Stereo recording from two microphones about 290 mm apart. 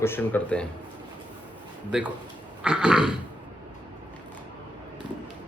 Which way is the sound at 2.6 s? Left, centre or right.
Centre.